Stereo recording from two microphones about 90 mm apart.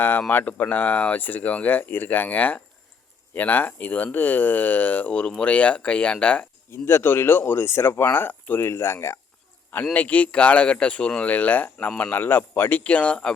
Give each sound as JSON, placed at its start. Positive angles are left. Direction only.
{"t": 0.0, "sound": "speech", "side_deg": 20}
{"t": 6.7, "sound": "speech", "side_deg": 25}
{"t": 9.9, "sound": "speech", "side_deg": 15}
{"t": 12.1, "sound": "speech", "side_deg": 20}